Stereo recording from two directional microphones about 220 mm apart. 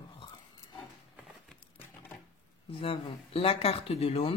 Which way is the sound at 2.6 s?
25° left (ahead or behind).